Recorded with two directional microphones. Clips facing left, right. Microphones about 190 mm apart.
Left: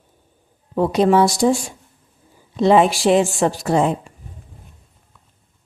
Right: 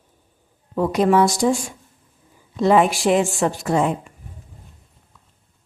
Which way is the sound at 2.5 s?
25° left (ahead or behind).